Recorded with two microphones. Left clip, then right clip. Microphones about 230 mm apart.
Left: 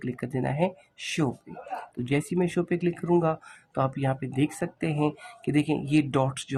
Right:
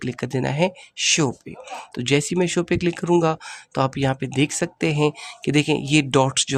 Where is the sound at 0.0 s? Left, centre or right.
Right.